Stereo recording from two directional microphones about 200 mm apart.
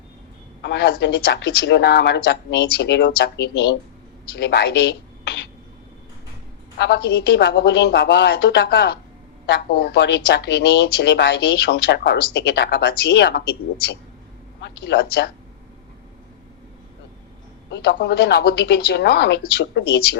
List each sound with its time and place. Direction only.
0.6 s speech: 55° left (ahead or behind)
6.7 s speech: 55° left (ahead or behind)
14.6 s speech: 55° left (ahead or behind)
17.7 s speech: 55° left (ahead or behind)